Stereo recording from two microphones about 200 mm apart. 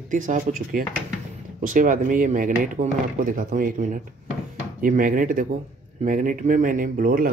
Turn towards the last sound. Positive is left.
turn(degrees=-45)  # may be behind; listen again after turning